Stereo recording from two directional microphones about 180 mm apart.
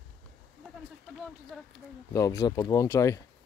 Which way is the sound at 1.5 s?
5° right (ahead or behind).